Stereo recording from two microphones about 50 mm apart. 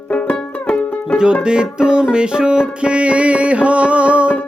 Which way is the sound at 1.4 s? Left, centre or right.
Centre.